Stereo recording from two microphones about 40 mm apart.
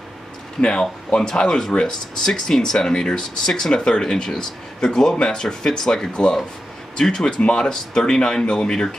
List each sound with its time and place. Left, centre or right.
0.6 s speech: left